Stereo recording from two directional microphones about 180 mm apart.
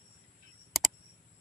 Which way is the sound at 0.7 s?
Centre (ahead or behind).